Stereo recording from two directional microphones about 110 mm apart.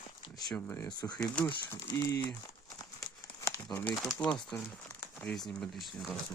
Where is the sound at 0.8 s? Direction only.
35° left (ahead or behind).